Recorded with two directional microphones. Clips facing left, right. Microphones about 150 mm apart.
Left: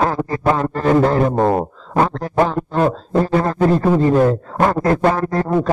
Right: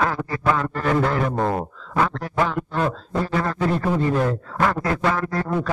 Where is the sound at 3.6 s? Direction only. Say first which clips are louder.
Left 8 dB; 40° left (ahead or behind).